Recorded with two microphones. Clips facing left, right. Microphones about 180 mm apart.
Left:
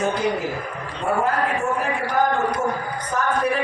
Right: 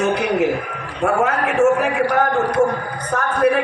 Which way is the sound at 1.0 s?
80° right.